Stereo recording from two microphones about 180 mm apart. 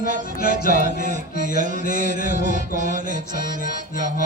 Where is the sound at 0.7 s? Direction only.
45° right (ahead or behind).